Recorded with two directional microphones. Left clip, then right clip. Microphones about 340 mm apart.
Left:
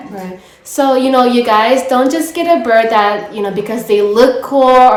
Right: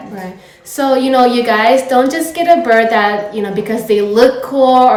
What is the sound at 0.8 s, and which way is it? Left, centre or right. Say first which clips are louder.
A woman's voice: even; centre.